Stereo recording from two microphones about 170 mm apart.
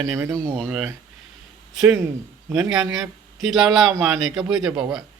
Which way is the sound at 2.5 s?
5° right (ahead or behind).